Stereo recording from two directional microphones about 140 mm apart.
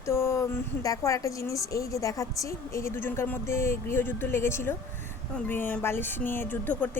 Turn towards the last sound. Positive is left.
turn(degrees=10)  # may be behind; listen again after turning